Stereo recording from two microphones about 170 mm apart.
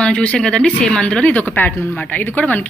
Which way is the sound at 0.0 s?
5° left (ahead or behind).